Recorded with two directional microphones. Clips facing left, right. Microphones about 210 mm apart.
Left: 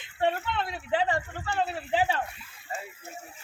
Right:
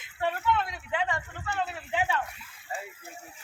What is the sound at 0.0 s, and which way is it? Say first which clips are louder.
Speech: left 2 dB; 30° left (ahead or behind).